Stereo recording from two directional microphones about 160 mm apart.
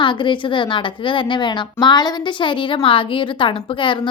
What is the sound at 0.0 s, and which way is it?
A woman's voice, 30° left (ahead or behind).